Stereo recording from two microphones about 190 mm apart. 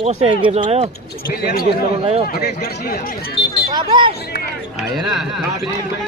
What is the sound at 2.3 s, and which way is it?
Speech, 55° left (ahead or behind).